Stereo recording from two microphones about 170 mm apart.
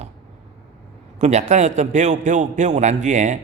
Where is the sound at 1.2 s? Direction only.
45° right (ahead or behind).